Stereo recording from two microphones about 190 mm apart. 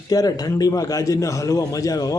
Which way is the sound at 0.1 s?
20° left (ahead or behind).